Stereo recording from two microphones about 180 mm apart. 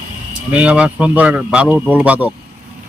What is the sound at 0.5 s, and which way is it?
A man's voice, 5° right (ahead or behind).